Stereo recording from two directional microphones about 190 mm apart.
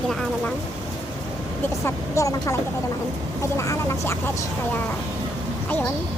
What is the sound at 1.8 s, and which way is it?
Speech, 15° left (ahead or behind).